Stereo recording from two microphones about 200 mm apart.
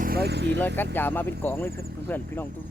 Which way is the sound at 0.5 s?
10° left (ahead or behind).